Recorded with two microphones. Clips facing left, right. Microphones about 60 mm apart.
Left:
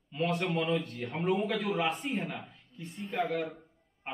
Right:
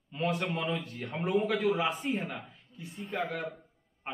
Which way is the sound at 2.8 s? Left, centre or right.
Centre.